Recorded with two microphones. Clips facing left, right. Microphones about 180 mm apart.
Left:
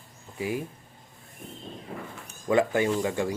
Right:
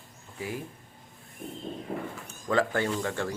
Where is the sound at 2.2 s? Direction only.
15° left (ahead or behind).